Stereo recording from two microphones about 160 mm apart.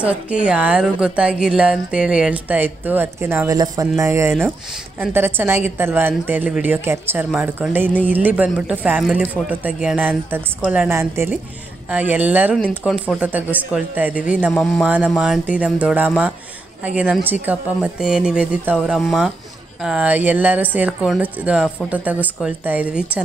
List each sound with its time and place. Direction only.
0.0 s a woman's voice: 10° right (ahead or behind)
14.6 s a woman's voice: 5° left (ahead or behind)